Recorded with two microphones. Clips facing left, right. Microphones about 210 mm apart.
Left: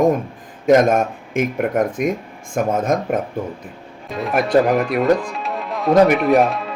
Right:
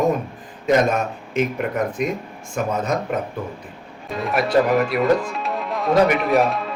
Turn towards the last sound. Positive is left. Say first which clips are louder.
# left 3 dB
turn(degrees=0)  # may be behind; listen again after turning